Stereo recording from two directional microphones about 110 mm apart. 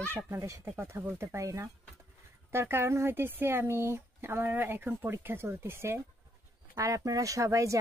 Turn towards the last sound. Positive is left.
turn(degrees=-30)  # may be behind; listen again after turning